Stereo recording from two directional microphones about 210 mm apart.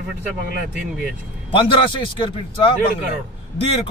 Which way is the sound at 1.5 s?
25° left (ahead or behind).